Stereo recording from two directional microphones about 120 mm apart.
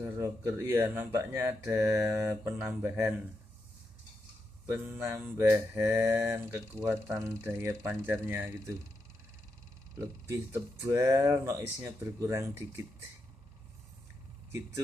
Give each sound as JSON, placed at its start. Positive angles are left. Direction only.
{"t": 0.0, "sound": "speech", "side_deg": -20}
{"t": 4.6, "sound": "speech", "side_deg": -20}
{"t": 9.9, "sound": "speech", "side_deg": -25}